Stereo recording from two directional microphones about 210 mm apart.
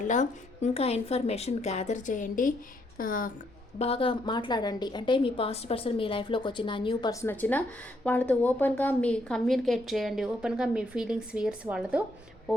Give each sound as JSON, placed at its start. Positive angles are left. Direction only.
{"t": 0.0, "sound": "a woman's voice", "side_deg": 35}
{"t": 3.8, "sound": "a woman's voice", "side_deg": 25}